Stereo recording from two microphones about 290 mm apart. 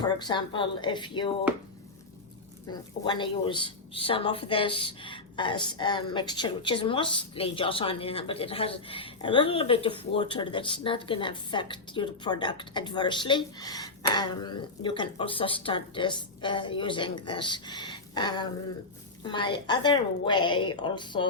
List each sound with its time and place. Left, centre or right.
0.0 s a woman's voice: centre
2.6 s a woman's voice: centre